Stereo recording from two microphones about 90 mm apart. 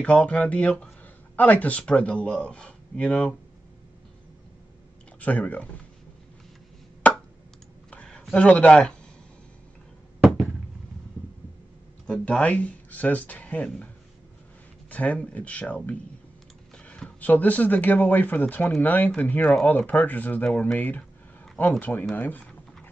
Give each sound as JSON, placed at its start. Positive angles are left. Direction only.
{"t": 0.0, "sound": "speech", "side_deg": 15}
{"t": 5.2, "sound": "speech", "side_deg": 15}
{"t": 7.0, "sound": "a sound", "side_deg": 15}
{"t": 10.2, "sound": "a sound", "side_deg": -10}
{"t": 12.1, "sound": "speech", "side_deg": 10}
{"t": 14.9, "sound": "speech", "side_deg": 15}